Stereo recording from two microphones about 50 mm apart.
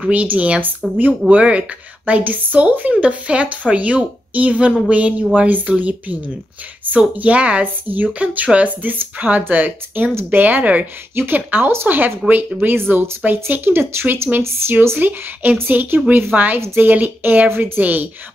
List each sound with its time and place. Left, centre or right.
0.0 s a woman's voice: right
11.1 s a woman's voice: right
16.5 s a woman's voice: right
16.8 s a woman's voice: right